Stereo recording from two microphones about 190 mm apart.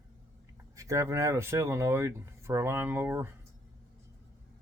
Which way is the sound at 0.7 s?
15° right (ahead or behind).